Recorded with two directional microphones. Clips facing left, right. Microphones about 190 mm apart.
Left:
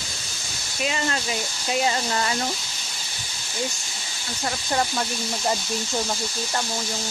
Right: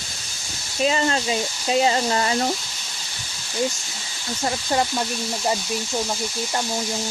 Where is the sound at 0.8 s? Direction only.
30° right (ahead or behind).